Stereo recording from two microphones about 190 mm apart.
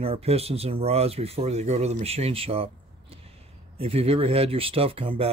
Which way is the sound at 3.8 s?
30° right (ahead or behind).